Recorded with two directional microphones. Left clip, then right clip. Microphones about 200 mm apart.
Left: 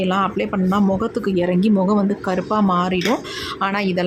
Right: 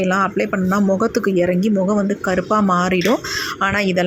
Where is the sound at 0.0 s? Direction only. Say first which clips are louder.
Right 2 dB; 5° right (ahead or behind).